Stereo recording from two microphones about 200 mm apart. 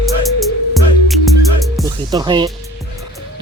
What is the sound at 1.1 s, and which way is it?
Music, centre (ahead or behind).